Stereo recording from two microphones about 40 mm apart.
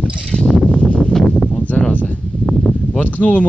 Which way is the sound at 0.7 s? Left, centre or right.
Left.